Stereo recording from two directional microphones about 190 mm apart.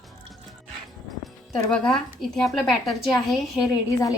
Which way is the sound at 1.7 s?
5° left (ahead or behind).